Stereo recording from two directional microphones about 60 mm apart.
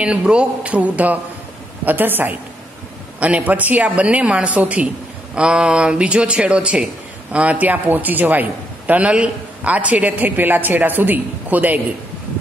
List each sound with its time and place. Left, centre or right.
0.0 s a man's voice: centre